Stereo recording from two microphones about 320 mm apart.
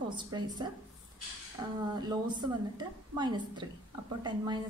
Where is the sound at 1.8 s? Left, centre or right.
Centre.